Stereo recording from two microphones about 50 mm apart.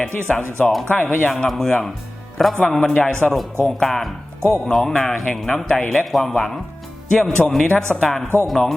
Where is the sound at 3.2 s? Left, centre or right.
Left.